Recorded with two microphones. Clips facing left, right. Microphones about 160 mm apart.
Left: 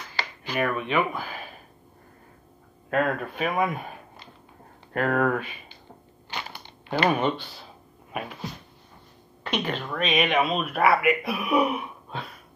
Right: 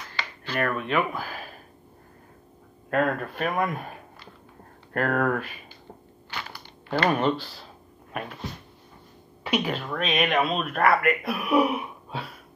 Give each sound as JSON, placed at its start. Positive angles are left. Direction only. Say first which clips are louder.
{"t": 0.4, "sound": "speech", "louder": "left 1 dB", "side_deg": 10}
{"t": 2.9, "sound": "speech", "louder": "even", "side_deg": 0}
{"t": 4.9, "sound": "speech", "louder": "left 1 dB", "side_deg": 0}
{"t": 6.3, "sound": "a sound", "louder": "left 1 dB", "side_deg": 20}
{"t": 6.9, "sound": "speech", "louder": "even", "side_deg": 5}
{"t": 8.1, "sound": "a sound", "louder": "left 1 dB", "side_deg": 5}
{"t": 9.4, "sound": "speech", "louder": "right 2 dB", "side_deg": -5}